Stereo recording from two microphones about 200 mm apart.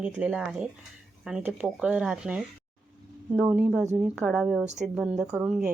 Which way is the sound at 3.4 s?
5° right (ahead or behind).